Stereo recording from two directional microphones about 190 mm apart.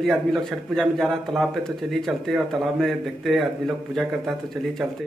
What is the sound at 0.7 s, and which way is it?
A man's voice, centre (ahead or behind).